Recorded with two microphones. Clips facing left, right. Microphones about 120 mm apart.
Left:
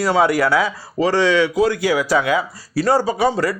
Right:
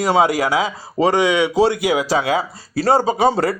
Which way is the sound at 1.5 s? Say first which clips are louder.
Right 1 dB; 30° right (ahead or behind).